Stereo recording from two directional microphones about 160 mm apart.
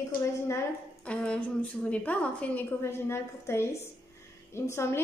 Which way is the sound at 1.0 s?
10° left (ahead or behind).